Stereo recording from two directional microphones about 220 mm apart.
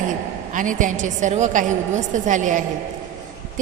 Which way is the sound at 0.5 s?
35° right (ahead or behind).